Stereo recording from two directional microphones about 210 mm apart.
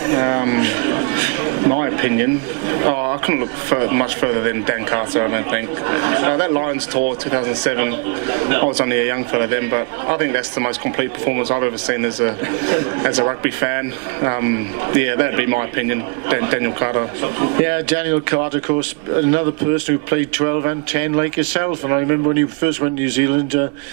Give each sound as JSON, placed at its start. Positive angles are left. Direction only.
{"t": 0.0, "sound": "a sound", "side_deg": -20}
{"t": 2.0, "sound": "a man's voice", "side_deg": -15}
{"t": 3.2, "sound": "a man's voice", "side_deg": -15}
{"t": 19.7, "sound": "a man's voice", "side_deg": -10}